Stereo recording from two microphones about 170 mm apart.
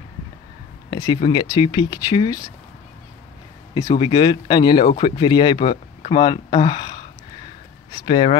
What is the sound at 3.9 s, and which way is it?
Speech, 25° left (ahead or behind).